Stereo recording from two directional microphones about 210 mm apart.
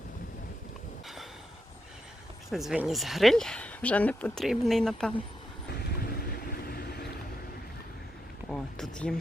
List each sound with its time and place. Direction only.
2.5 s speech: centre (ahead or behind)
5.7 s vehicle: 45° left (ahead or behind)
8.4 s a sound: centre (ahead or behind)